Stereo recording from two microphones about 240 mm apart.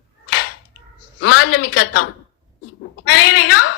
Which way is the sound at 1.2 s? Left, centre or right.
Left.